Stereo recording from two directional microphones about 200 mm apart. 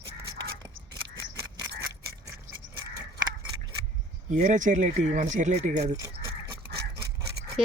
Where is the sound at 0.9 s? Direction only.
20° right (ahead or behind).